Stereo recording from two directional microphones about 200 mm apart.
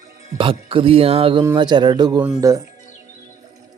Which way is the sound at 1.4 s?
20° right (ahead or behind).